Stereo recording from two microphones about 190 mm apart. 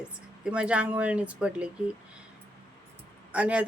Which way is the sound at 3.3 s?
5° right (ahead or behind).